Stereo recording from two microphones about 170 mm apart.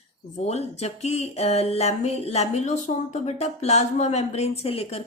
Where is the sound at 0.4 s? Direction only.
40° left (ahead or behind).